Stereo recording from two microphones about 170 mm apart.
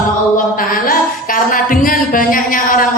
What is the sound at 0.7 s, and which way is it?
Music, 55° left (ahead or behind).